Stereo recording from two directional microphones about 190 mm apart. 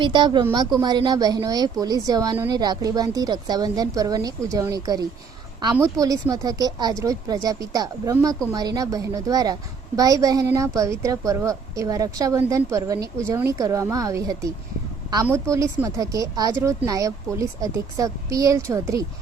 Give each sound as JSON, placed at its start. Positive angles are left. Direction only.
{"t": 0.0, "sound": "a woman's voice", "side_deg": -25}